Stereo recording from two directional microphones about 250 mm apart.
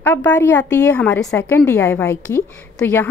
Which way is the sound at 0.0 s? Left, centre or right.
Centre.